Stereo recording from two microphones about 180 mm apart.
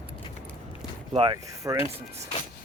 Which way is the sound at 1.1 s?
30° right (ahead or behind).